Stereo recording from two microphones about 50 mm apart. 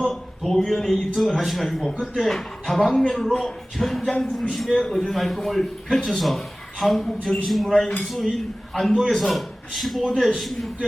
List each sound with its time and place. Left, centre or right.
0.0 s a man's voice: centre